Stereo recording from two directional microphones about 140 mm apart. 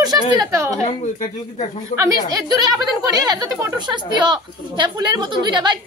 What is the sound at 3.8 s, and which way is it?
A woman's voice, 30° right (ahead or behind).